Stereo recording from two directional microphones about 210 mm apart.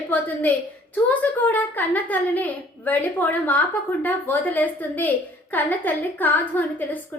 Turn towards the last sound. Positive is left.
turn(degrees=10)  # may be behind; listen again after turning